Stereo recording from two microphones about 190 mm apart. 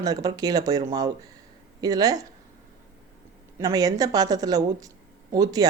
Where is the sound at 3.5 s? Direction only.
20° right (ahead or behind).